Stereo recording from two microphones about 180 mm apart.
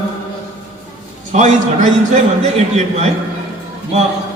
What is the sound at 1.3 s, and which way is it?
Speech, 40° right (ahead or behind).